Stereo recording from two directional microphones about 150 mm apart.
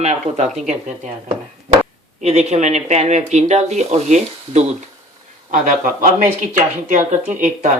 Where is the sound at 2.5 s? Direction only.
50° right (ahead or behind).